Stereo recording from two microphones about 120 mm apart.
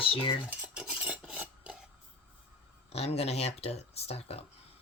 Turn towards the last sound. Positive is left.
turn(degrees=60)  # may be behind; listen again after turning